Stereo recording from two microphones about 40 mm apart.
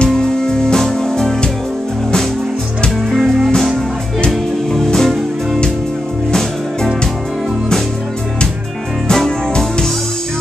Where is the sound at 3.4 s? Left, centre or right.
Centre.